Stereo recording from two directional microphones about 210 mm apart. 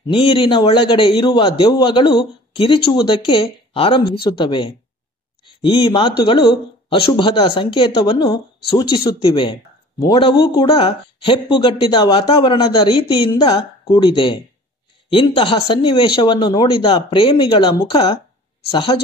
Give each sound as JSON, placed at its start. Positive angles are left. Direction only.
{"t": 0.0, "sound": "speech", "side_deg": 25}